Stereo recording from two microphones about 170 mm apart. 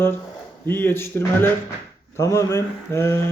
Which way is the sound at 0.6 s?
10° left (ahead or behind).